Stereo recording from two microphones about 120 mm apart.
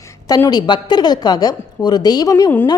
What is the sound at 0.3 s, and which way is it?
A woman's voice, 30° left (ahead or behind).